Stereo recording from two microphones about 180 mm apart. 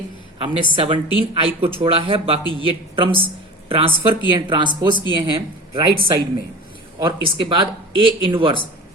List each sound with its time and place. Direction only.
0.3 s speech: 30° right (ahead or behind)